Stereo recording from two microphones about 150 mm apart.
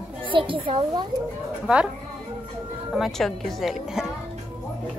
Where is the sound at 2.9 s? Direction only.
Centre (ahead or behind).